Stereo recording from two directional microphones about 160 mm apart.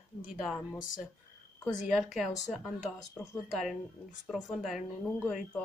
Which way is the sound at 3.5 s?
Centre (ahead or behind).